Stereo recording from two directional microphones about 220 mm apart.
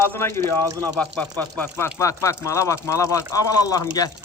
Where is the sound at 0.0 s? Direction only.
10° left (ahead or behind).